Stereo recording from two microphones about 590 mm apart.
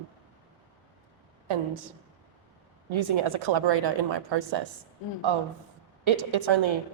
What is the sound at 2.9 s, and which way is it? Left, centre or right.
A woman's voice, right.